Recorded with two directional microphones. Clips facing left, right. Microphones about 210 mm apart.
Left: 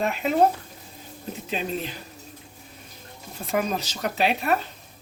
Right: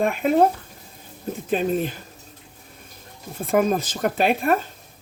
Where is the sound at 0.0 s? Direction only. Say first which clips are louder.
Right 4 dB; 50° right (ahead or behind).